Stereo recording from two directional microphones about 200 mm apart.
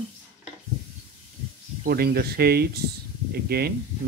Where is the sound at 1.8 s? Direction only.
50° right (ahead or behind).